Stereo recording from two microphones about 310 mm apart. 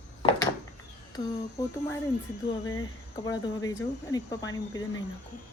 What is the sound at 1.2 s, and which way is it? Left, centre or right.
Speech, centre.